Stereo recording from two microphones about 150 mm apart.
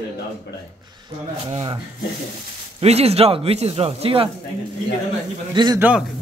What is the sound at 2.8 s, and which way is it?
Speech, 45° right (ahead or behind).